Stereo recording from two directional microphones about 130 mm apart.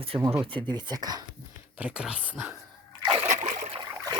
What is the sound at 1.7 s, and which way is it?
Speech, 10° right (ahead or behind).